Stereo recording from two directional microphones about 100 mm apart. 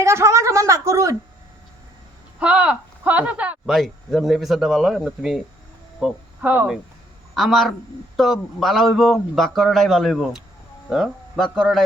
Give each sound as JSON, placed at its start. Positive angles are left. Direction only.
{"t": 0.0, "sound": "a woman's voice", "side_deg": -30}
{"t": 2.4, "sound": "speech", "side_deg": -10}
{"t": 3.7, "sound": "speech", "side_deg": 0}
{"t": 6.4, "sound": "speech", "side_deg": -20}
{"t": 7.3, "sound": "speech", "side_deg": 0}